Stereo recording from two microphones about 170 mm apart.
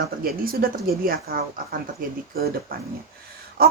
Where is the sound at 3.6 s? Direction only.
65° right (ahead or behind).